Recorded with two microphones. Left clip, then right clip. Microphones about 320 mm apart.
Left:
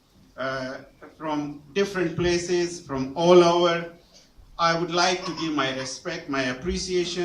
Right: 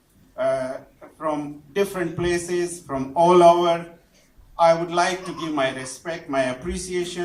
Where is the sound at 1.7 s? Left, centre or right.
Centre.